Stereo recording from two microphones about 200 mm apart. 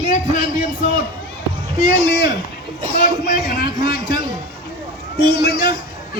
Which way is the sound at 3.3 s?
45° left (ahead or behind).